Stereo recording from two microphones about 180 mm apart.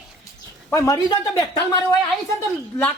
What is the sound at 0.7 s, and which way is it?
Speech, 15° left (ahead or behind).